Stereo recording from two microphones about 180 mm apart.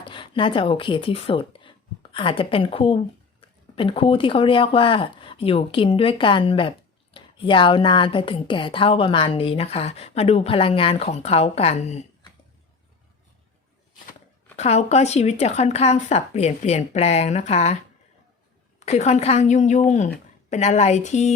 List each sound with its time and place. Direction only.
0.0 s speech: 30° left (ahead or behind)
14.5 s speech: 35° left (ahead or behind)
18.8 s speech: 40° left (ahead or behind)